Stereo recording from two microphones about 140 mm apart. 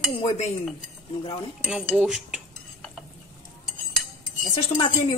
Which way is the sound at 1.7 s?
5° right (ahead or behind).